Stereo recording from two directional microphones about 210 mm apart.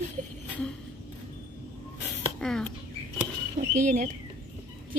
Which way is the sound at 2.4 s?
5° left (ahead or behind).